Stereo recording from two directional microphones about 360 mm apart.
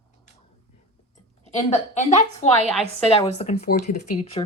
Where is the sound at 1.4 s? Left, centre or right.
Centre.